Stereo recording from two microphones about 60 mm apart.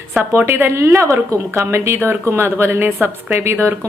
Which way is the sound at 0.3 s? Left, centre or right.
Right.